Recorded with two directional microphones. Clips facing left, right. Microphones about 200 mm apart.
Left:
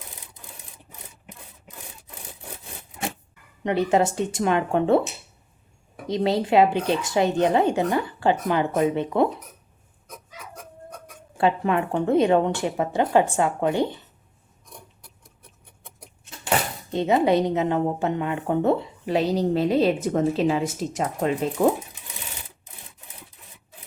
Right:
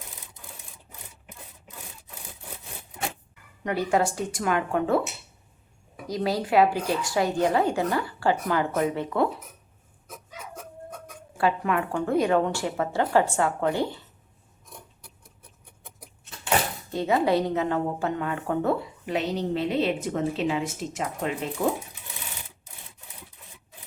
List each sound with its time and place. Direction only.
3.6 s a woman's voice: 25° left (ahead or behind)
6.1 s a woman's voice: 25° left (ahead or behind)
11.3 s a woman's voice: 25° left (ahead or behind)
16.9 s a woman's voice: 20° left (ahead or behind); by 21.5 s 35° left (ahead or behind)